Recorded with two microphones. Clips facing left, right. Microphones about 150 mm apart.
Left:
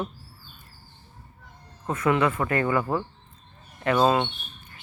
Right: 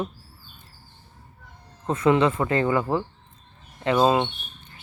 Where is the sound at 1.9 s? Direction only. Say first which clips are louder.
Right 3 dB; 25° right (ahead or behind).